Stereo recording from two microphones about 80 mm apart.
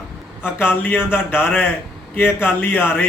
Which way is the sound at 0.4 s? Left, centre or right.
Left.